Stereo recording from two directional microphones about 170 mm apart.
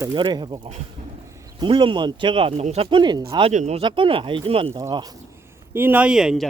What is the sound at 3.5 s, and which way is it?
Speech, 40° right (ahead or behind).